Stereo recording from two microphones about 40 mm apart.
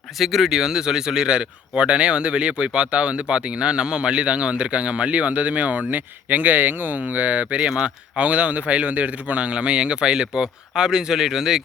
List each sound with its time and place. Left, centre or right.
0.2 s speech: centre
0.5 s speech: centre; by 7.0 s right
7.0 s speech: right
7.8 s speech: right; by 11.6 s centre